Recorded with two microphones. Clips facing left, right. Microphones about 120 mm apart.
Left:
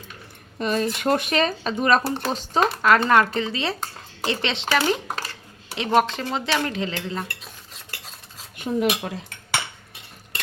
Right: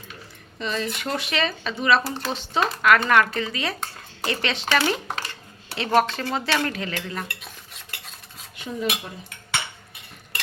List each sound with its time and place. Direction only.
0.6 s speech: 45° left (ahead or behind); by 4.7 s 20° left (ahead or behind)
5.7 s dishes: 20° left (ahead or behind)
8.5 s cutlery: 60° left (ahead or behind)